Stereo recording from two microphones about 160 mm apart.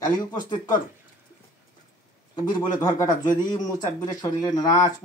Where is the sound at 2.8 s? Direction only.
20° left (ahead or behind).